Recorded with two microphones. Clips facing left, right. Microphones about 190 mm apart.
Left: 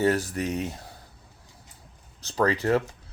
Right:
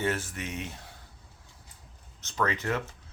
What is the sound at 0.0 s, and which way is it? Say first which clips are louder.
Speech: left 7 dB; 35° left (ahead or behind).